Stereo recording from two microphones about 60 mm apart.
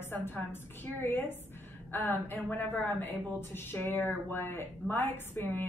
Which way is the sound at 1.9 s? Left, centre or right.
Left.